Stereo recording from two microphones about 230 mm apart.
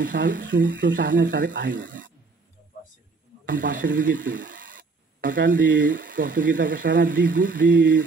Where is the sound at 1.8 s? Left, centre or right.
Right.